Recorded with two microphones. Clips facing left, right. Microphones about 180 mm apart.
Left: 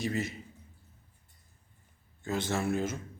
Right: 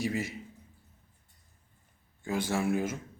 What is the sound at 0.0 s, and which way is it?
Speech, 15° right (ahead or behind).